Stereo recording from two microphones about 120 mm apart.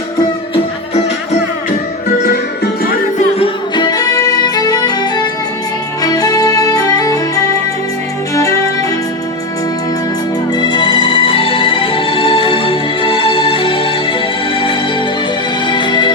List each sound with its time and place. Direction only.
3.8 s music: 30° left (ahead or behind)
10.5 s music: 40° left (ahead or behind)